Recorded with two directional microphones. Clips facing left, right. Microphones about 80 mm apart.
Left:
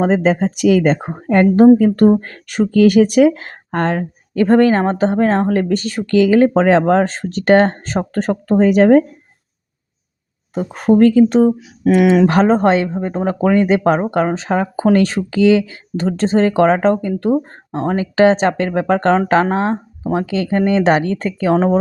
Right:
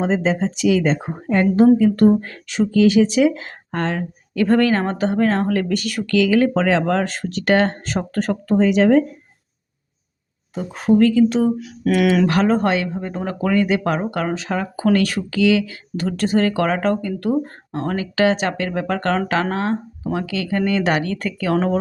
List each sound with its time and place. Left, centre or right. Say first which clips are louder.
0.0 s speech: left 5 dB; left
10.5 s speech: left 3 dB; left
11.9 s speech: left 5 dB; left